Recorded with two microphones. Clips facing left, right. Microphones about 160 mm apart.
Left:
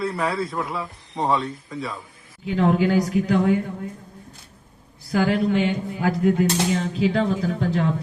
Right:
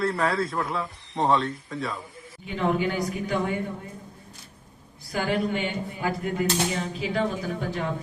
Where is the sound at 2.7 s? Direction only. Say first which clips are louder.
Left 7 dB; 90° left.